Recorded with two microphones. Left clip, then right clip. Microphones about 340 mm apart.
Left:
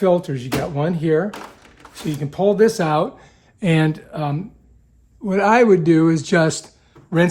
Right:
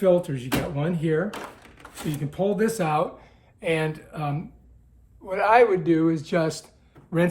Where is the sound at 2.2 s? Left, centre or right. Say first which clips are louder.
Left 9 dB; left.